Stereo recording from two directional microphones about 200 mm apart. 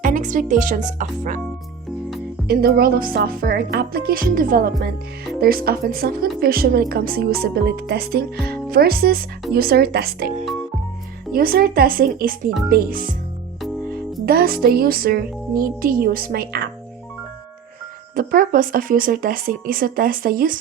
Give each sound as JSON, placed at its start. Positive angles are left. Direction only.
{"t": 0.0, "sound": "speech", "side_deg": -40}
{"t": 2.5, "sound": "speech", "side_deg": -50}
{"t": 14.3, "sound": "speech", "side_deg": -50}
{"t": 18.1, "sound": "speech", "side_deg": -45}